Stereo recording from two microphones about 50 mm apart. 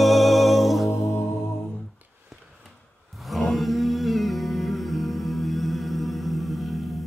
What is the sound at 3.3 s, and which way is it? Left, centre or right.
Humming, centre.